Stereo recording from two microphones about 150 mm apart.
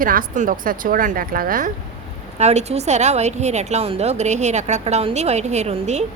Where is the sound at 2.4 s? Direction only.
45° right (ahead or behind).